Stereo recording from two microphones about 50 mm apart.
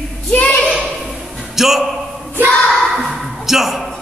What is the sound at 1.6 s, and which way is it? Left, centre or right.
Speech, centre.